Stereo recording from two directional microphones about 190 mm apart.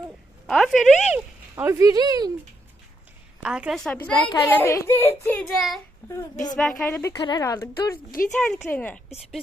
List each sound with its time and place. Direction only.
0.4 s speech: centre (ahead or behind); by 2.3 s 20° right (ahead or behind)
3.4 s a woman's voice: 5° right (ahead or behind)
3.9 s speech: 5° left (ahead or behind)
5.5 s a woman's voice: centre (ahead or behind)
6.1 s a woman's voice: 20° left (ahead or behind)
6.6 s speech: 5° left (ahead or behind)
7.1 s a woman's voice: 25° left (ahead or behind)